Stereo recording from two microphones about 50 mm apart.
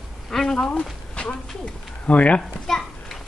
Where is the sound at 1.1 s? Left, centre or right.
Left.